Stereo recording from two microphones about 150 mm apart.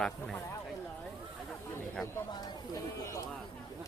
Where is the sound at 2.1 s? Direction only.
25° left (ahead or behind).